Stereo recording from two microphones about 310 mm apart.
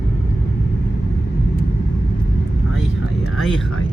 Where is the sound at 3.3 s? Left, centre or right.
Centre.